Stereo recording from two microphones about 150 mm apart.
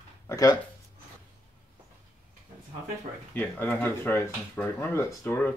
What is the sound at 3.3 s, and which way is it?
Speech, 10° left (ahead or behind).